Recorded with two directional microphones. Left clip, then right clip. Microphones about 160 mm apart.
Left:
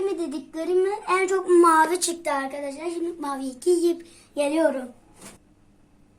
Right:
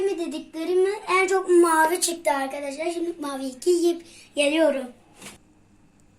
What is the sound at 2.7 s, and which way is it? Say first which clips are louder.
Child singing: right 2 dB; 40° left (ahead or behind).